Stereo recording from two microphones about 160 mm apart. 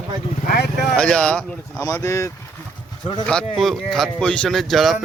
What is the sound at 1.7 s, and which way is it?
Speech, 20° left (ahead or behind).